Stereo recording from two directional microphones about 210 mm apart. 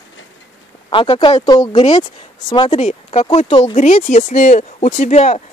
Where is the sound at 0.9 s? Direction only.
25° left (ahead or behind).